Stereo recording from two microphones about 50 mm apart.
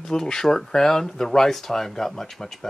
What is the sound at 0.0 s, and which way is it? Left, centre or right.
Speech, centre.